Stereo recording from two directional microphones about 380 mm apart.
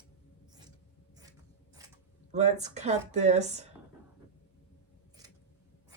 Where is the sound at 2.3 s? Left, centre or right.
Centre.